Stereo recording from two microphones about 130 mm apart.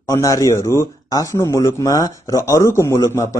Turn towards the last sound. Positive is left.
turn(degrees=25)  # may be behind; listen again after turning